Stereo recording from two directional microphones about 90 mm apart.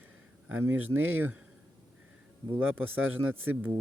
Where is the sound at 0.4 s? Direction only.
20° right (ahead or behind).